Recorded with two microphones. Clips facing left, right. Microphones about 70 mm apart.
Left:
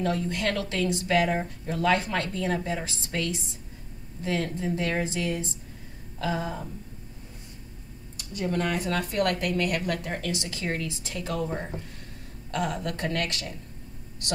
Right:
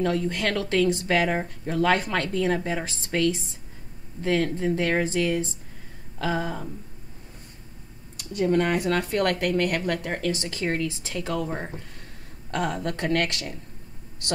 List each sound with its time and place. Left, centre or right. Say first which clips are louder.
0.0 s speech: right 2 dB; right
8.2 s speech: right 6 dB; right
12.4 s speech: right 2 dB; right